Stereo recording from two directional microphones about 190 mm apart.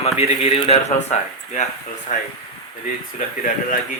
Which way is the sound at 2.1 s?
45° left (ahead or behind).